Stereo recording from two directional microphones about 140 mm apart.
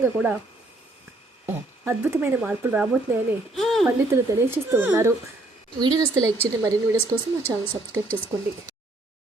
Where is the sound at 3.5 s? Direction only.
Centre (ahead or behind).